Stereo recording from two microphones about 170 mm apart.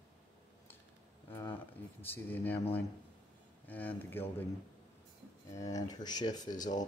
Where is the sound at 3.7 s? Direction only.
10° left (ahead or behind).